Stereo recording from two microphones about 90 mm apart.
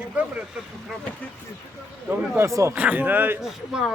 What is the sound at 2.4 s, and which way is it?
Speech, 35° right (ahead or behind).